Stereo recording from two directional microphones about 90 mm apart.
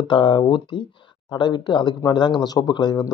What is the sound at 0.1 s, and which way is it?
Speech, 60° left (ahead or behind).